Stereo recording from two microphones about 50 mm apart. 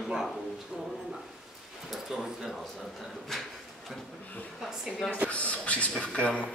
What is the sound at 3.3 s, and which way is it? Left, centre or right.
Speech, centre.